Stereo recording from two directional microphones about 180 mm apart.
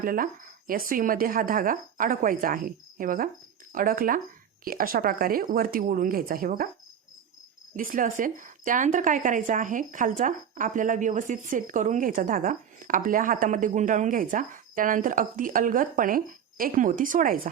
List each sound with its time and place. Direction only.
0.0 s a woman's voice: 50° right (ahead or behind)
7.8 s a woman's voice: 50° right (ahead or behind)